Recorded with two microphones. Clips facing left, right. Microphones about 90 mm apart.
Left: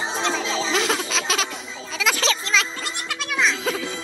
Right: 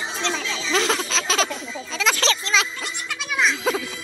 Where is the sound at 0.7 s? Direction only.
5° left (ahead or behind).